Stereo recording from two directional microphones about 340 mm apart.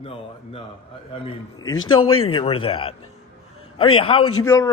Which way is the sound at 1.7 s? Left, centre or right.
Left.